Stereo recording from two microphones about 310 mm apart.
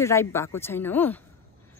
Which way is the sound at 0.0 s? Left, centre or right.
Centre.